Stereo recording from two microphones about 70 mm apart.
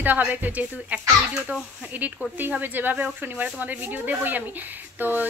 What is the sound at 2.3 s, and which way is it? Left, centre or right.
A woman's voice, right.